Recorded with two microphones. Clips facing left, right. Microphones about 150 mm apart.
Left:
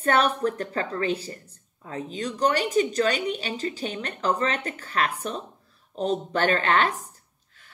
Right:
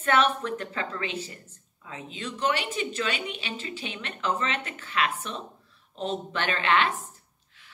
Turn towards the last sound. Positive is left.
turn(degrees=40)  # may be behind; listen again after turning